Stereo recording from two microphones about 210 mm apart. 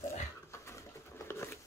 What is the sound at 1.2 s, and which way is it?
Patter, 15° left (ahead or behind).